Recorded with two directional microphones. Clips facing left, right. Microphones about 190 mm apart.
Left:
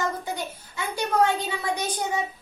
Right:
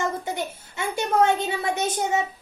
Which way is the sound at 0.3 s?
25° right (ahead or behind).